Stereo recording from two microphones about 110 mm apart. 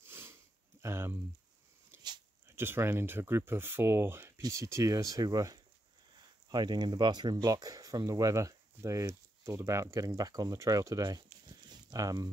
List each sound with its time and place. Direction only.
0.0 s sniff: 20° right (ahead or behind)
2.4 s speech: 20° right (ahead or behind)